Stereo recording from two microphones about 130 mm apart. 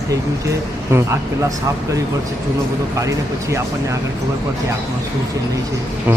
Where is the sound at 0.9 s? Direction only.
20° right (ahead or behind).